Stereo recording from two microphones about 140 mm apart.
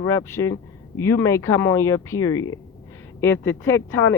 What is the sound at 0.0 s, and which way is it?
Speech, 20° left (ahead or behind).